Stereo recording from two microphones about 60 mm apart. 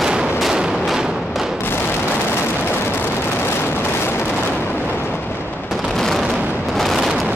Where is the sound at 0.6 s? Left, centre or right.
Centre.